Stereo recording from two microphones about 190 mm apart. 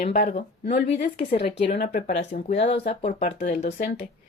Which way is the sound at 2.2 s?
35° left (ahead or behind).